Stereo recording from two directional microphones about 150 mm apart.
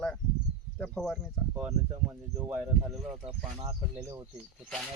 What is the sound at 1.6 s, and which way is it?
Speech, 10° right (ahead or behind).